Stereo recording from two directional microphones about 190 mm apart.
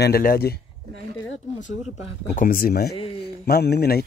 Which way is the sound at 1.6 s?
40° left (ahead or behind).